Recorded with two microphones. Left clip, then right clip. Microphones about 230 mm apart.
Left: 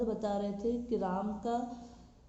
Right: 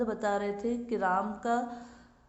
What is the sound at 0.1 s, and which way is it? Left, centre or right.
A woman's voice, right.